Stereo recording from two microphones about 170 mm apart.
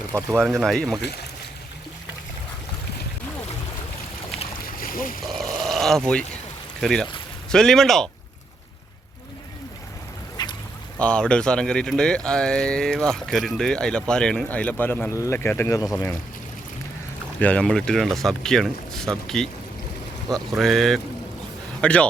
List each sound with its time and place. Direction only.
0.3 s speech: centre (ahead or behind)
4.8 s boat: 55° left (ahead or behind)
5.2 s speech: centre (ahead or behind)
10.4 s duck: 25° left (ahead or behind)
10.9 s speech: 5° left (ahead or behind)
17.4 s a man's voice: 5° left (ahead or behind)